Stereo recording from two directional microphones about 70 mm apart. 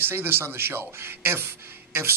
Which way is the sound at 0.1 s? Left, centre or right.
Right.